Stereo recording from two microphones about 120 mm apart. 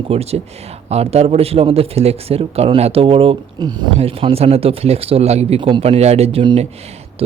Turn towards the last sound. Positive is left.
turn(degrees=-60)  # may be behind; listen again after turning